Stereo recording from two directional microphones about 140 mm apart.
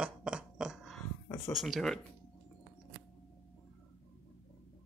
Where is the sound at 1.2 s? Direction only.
15° left (ahead or behind).